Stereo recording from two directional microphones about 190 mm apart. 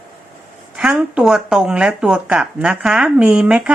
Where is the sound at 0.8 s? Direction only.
5° right (ahead or behind).